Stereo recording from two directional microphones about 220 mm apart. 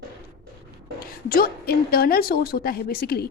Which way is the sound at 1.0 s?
40° left (ahead or behind).